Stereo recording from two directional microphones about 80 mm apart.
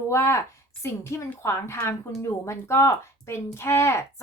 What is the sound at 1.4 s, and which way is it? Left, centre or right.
Speech, left.